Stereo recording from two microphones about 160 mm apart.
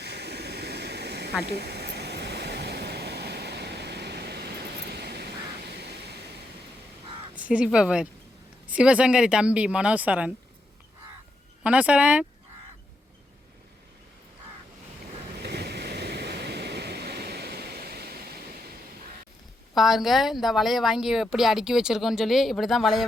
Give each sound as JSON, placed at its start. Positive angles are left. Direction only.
{"t": 0.0, "sound": "a sound", "side_deg": -90}
{"t": 7.3, "sound": "speech", "side_deg": -10}
{"t": 11.6, "sound": "speech", "side_deg": -10}
{"t": 15.4, "sound": "waves", "side_deg": -90}
{"t": 19.7, "sound": "speech", "side_deg": 0}